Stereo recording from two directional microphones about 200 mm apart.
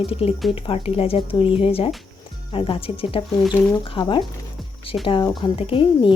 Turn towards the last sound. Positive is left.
turn(degrees=25)  # may be behind; listen again after turning